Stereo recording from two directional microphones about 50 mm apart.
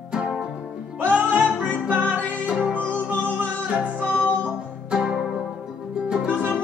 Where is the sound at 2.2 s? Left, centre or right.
Left.